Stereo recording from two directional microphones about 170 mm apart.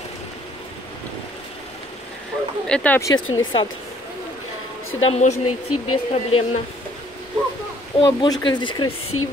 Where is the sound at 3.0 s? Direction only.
25° left (ahead or behind).